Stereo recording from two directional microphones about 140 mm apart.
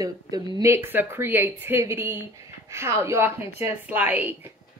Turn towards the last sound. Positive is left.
turn(degrees=-15)  # may be behind; listen again after turning